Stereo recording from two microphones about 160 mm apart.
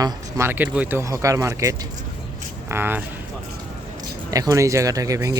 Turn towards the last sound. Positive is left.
turn(degrees=-20)  # may be behind; listen again after turning